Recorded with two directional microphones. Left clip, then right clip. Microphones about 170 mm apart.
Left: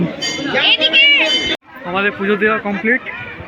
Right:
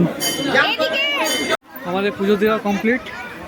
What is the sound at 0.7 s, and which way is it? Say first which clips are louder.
Speech: left 8 dB; 55° right (ahead or behind).